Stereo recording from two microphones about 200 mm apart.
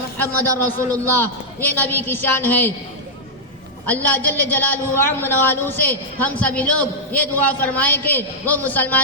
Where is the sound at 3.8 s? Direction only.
10° left (ahead or behind).